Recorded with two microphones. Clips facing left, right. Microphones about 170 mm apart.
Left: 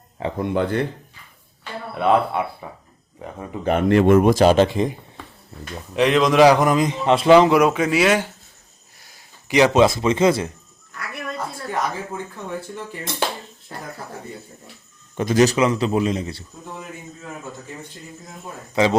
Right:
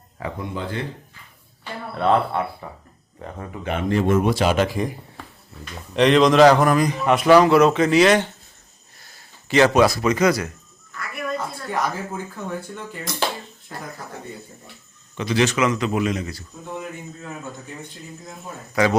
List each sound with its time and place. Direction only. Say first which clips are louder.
0.3 s speech: left 9 dB; 60° left (ahead or behind)
2.0 s a man's voice: left 1 dB; 10° left (ahead or behind)
3.8 s speech: left 5 dB; 65° left (ahead or behind); by 4.5 s 45° left (ahead or behind)
4.5 s speech: left 4 dB; 25° left (ahead or behind)
5.9 s a man's voice: right 2 dB; 5° left (ahead or behind)
9.5 s speech: left 1 dB; 15° left (ahead or behind)
11.7 s speech: right 1 dB; centre (ahead or behind)
15.1 s a man's voice: left 4 dB; 45° left (ahead or behind); by 16.4 s 30° left (ahead or behind)
18.7 s speech: left 1 dB; 20° left (ahead or behind)